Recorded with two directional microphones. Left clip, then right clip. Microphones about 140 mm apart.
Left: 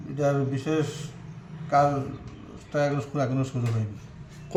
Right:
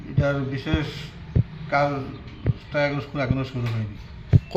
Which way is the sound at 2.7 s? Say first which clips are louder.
Right 2 dB; 20° left (ahead or behind).